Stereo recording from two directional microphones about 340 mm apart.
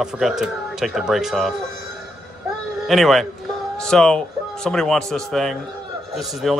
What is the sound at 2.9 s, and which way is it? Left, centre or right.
A man's voice, centre.